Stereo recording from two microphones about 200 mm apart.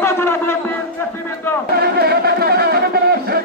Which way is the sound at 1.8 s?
50° right (ahead or behind).